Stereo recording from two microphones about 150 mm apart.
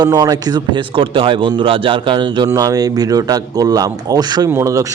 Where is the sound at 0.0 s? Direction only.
25° right (ahead or behind).